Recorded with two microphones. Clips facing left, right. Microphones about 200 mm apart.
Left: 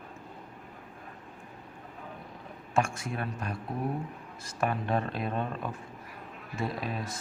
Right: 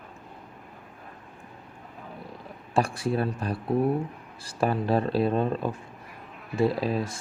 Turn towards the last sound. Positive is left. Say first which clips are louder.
# right 8 dB
turn(degrees=-30)  # may be behind; listen again after turning